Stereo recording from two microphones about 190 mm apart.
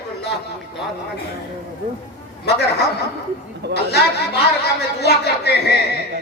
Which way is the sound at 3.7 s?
60° left (ahead or behind).